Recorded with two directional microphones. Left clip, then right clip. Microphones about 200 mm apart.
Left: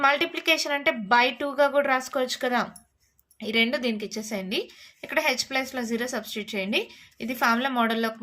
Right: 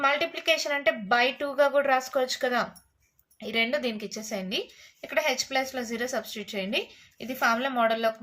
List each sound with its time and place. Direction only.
0.0 s speech: 30° left (ahead or behind)